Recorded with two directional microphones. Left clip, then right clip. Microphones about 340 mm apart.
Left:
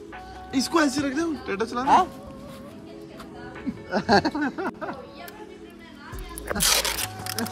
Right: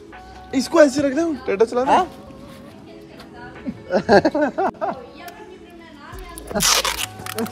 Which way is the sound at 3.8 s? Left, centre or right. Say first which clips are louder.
Right 6 dB; centre.